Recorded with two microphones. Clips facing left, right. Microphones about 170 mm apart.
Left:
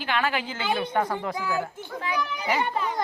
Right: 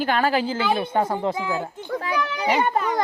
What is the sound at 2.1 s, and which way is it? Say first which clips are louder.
Speech: right 2 dB; 75° right (ahead or behind).